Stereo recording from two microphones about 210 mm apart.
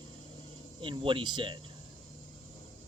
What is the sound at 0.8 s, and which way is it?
Speech, 25° right (ahead or behind).